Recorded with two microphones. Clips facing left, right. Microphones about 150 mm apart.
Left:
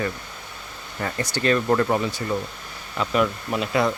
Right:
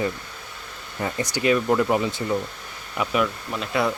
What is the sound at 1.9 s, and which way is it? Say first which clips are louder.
Speech: right 1 dB; 20° right (ahead or behind).